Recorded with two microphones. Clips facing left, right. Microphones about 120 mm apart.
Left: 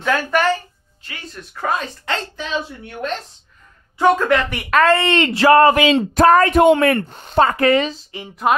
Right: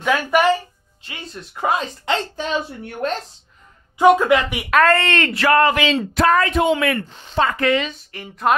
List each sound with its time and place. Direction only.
0.0 s a sound: 10° right (ahead or behind)
1.0 s speech: 25° right (ahead or behind)
4.0 s speech: 10° right (ahead or behind)
5.3 s a woman's voice: 30° left (ahead or behind)
8.1 s a woman's voice: 15° left (ahead or behind)